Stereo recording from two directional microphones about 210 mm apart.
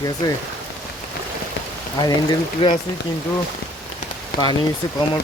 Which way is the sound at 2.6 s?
25° left (ahead or behind).